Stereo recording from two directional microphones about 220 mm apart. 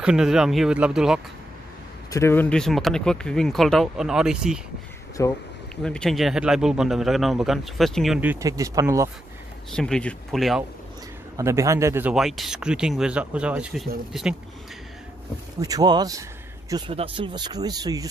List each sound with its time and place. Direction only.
0.0 s a man's voice: 5° right (ahead or behind)
2.0 s a man's voice: 10° left (ahead or behind); by 4.6 s 5° right (ahead or behind)
5.2 s speech: 15° left (ahead or behind)
5.8 s a man's voice: 5° left (ahead or behind); by 9.1 s 15° right (ahead or behind)
9.7 s a man's voice: 5° left (ahead or behind)
11.3 s a man's voice: 15° right (ahead or behind)
15.6 s speech: 15° right (ahead or behind)